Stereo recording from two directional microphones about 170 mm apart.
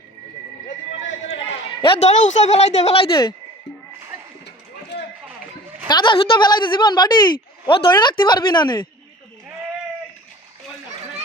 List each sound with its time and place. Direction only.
1.8 s speech: 35° left (ahead or behind)
4.4 s a sound: 75° left (ahead or behind)
5.9 s a woman's voice: 25° left (ahead or behind)